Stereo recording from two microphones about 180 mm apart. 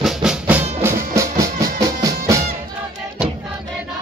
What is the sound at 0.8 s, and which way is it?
Music, 15° right (ahead or behind).